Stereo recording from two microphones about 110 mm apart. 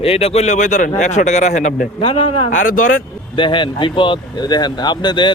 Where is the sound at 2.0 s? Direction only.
55° left (ahead or behind).